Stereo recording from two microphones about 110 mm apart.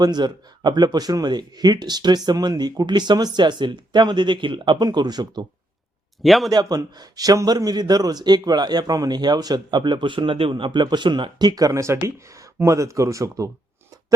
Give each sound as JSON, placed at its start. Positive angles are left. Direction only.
{"t": 0.0, "sound": "a man's voice", "side_deg": -40}
{"t": 6.2, "sound": "speech", "side_deg": 0}
{"t": 6.5, "sound": "a man's voice", "side_deg": -35}